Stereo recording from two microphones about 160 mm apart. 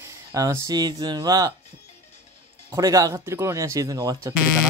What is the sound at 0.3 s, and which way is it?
Speech, 20° right (ahead or behind).